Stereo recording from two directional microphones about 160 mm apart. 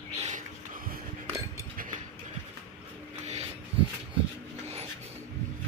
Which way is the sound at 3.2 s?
45° right (ahead or behind).